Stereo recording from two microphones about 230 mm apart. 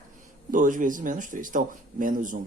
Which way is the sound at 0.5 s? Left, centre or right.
Right.